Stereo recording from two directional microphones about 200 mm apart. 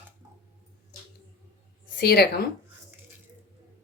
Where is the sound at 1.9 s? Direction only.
50° left (ahead or behind).